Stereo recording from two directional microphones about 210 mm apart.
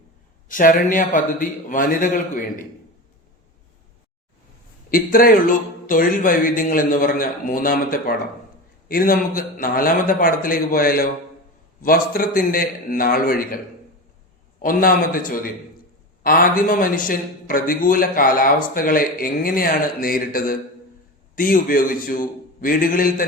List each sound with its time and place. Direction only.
0.4 s a man's voice: 40° left (ahead or behind)
4.9 s a man's voice: 45° left (ahead or behind)
14.6 s a man's voice: 40° left (ahead or behind)